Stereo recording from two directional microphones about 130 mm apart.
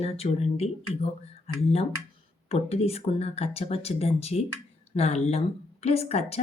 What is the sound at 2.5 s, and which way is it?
Speech, 50° left (ahead or behind).